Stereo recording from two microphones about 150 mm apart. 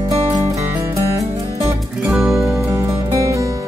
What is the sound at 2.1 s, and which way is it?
Music, centre (ahead or behind).